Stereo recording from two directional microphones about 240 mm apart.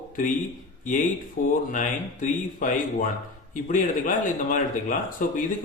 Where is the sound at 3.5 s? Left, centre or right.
Left.